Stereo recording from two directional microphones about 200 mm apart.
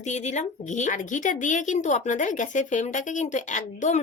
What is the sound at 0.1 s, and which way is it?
A woman's voice, 35° left (ahead or behind).